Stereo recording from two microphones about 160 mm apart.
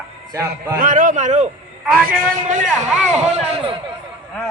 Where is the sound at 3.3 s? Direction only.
40° right (ahead or behind).